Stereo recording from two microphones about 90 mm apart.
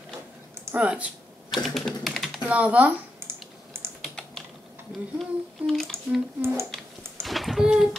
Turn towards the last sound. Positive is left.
turn(degrees=-5)  # may be behind; listen again after turning